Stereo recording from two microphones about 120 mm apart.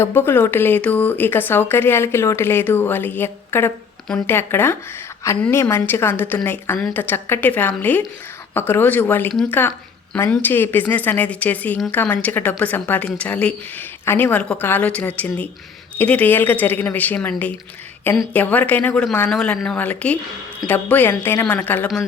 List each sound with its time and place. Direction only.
0.0 s speech: 20° left (ahead or behind)